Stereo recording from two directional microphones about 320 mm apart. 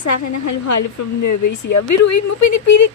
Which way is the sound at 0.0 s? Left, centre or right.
Left.